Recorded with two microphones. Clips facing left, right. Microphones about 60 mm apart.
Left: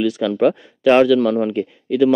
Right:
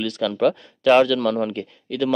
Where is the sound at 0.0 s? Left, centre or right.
Centre.